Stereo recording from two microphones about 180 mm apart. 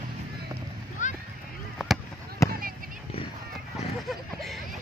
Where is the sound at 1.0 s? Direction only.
45° left (ahead or behind).